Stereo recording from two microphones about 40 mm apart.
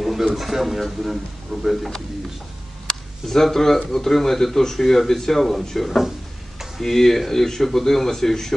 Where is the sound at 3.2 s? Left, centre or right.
Centre.